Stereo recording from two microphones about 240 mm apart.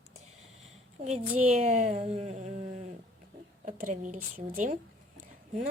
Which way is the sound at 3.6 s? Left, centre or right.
Right.